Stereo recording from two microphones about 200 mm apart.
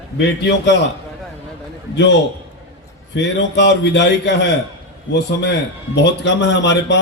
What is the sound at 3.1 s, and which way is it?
A man's voice, 60° left (ahead or behind).